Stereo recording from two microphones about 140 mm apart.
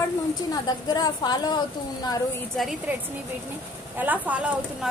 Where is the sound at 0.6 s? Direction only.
30° left (ahead or behind).